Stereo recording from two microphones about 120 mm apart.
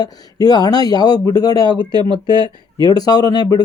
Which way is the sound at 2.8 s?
35° left (ahead or behind).